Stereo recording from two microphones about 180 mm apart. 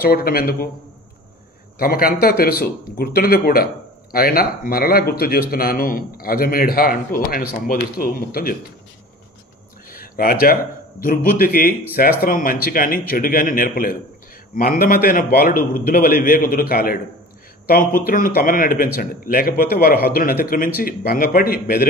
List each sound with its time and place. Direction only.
0.0 s a man's voice: 55° left (ahead or behind)
1.8 s a man's voice: 55° left (ahead or behind)
9.8 s a man's voice: 55° left (ahead or behind)